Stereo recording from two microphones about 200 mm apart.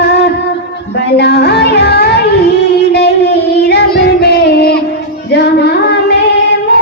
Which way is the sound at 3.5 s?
55° left (ahead or behind).